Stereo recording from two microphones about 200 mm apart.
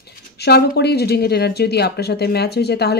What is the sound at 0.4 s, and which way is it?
Speech, 55° left (ahead or behind).